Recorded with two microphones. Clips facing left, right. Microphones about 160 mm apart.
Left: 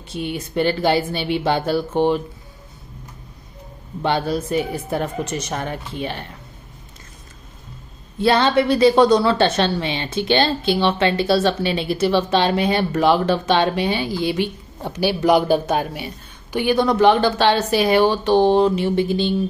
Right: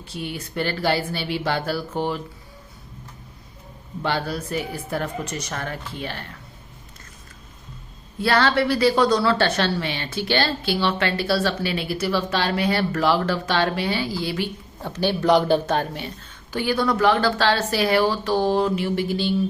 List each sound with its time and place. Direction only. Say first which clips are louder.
0.0 s a woman's voice: left 5 dB; 20° left (ahead or behind)
4.0 s a woman's voice: left 5 dB; 20° left (ahead or behind)
8.2 s a woman's voice: left 4 dB; 20° left (ahead or behind)